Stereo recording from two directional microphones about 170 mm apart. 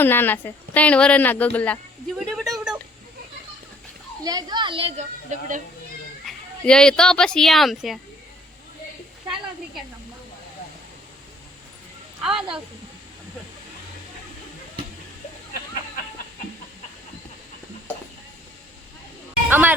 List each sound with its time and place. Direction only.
0.0 s speech: 10° left (ahead or behind)
2.1 s a sound: centre (ahead or behind)
4.2 s a child's voice: 20° right (ahead or behind); by 5.5 s 40° right (ahead or behind)
6.2 s speech: 5° left (ahead or behind)
12.2 s speech: 5° right (ahead or behind)
19.5 s speech: 10° right (ahead or behind)